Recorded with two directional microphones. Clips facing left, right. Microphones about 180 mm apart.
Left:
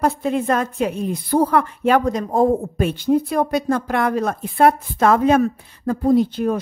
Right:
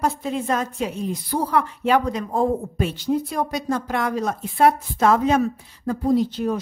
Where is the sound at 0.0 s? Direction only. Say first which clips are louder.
Left 5 dB; 60° left (ahead or behind).